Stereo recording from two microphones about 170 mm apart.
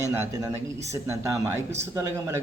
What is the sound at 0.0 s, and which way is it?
Speech, 15° right (ahead or behind).